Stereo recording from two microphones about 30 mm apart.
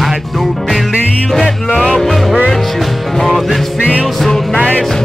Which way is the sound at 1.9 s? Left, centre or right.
Centre.